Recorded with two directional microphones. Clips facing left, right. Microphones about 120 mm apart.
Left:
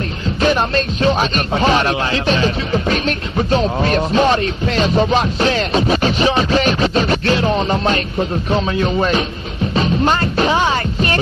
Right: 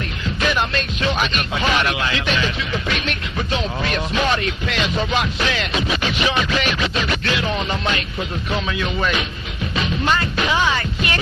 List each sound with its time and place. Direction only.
0.4 s speech: 35° left (ahead or behind)
9.8 s music: 35° left (ahead or behind)